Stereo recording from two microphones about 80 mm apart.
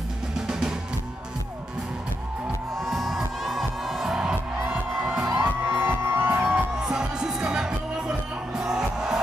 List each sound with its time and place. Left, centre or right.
0.5 s music: centre
2.8 s music: centre
5.7 s music: right
6.8 s music: centre